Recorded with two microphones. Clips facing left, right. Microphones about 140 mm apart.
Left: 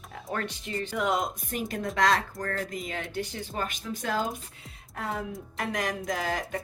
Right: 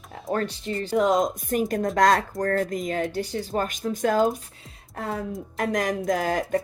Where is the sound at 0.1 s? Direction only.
35° right (ahead or behind).